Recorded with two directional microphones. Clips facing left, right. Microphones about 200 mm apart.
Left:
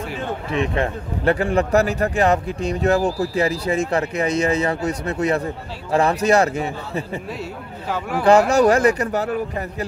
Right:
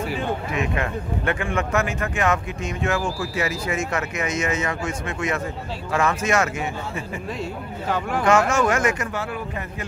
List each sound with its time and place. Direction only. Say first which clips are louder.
0.5 s speech: left 4 dB; 30° left (ahead or behind)
8.2 s speech: left 6 dB; 35° left (ahead or behind)